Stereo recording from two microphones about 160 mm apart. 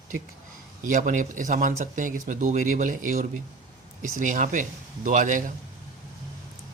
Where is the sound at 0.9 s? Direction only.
55° right (ahead or behind).